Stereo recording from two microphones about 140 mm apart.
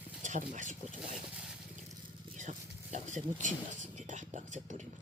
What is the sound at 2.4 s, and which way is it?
Speech, 60° right (ahead or behind).